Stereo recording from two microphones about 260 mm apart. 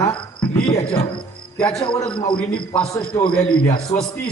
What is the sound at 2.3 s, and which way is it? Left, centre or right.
Speech, centre.